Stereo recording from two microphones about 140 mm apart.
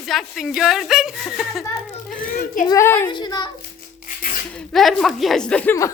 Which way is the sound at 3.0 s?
30° left (ahead or behind).